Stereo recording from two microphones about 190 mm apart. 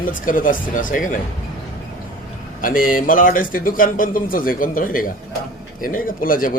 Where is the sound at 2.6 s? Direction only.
45° left (ahead or behind).